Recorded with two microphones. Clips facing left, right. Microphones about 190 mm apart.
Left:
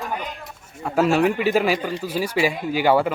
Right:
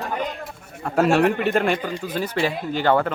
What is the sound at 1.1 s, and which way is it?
Speech, centre (ahead or behind).